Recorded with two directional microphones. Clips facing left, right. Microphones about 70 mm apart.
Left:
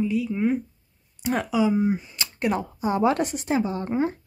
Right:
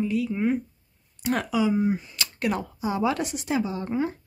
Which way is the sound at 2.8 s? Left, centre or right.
Left.